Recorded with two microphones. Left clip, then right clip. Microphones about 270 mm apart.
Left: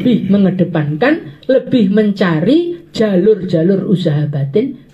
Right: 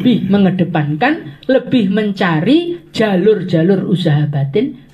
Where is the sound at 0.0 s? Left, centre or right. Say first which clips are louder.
Even; right.